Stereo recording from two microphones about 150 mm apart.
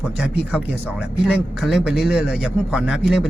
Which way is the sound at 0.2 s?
5° right (ahead or behind).